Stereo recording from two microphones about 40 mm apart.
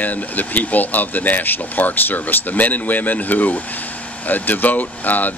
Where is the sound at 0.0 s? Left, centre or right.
Left.